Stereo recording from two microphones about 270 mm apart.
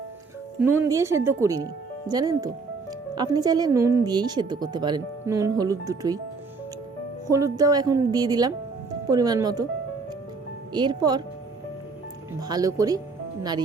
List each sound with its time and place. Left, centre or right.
0.6 s a woman's voice: centre
7.3 s a woman's voice: centre
10.7 s a woman's voice: centre
12.4 s a woman's voice: centre